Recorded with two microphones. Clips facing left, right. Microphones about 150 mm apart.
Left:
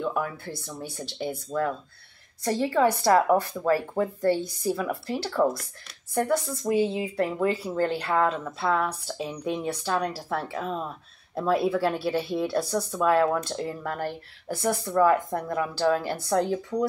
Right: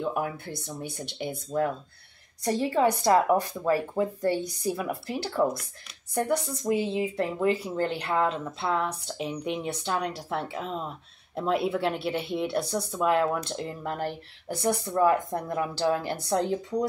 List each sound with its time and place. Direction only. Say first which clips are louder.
0.1 s speech: even; 20° right (ahead or behind)